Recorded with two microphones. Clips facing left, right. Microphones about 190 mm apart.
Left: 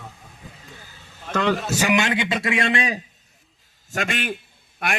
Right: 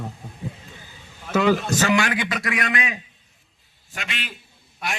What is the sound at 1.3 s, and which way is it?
A man's voice, 5° right (ahead or behind).